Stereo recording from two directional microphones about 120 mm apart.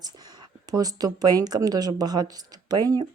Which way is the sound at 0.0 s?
35° right (ahead or behind).